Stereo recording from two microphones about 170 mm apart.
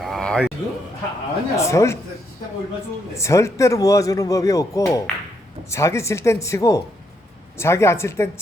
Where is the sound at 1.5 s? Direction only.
15° left (ahead or behind).